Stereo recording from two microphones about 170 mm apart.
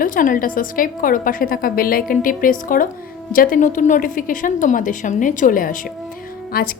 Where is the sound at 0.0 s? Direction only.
55° left (ahead or behind).